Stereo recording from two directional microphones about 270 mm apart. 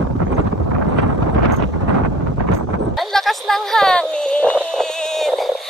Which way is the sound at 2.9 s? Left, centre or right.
Centre.